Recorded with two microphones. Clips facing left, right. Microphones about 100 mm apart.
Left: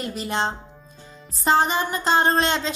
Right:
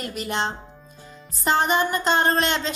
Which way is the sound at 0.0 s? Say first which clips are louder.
Left 1 dB; 30° left (ahead or behind).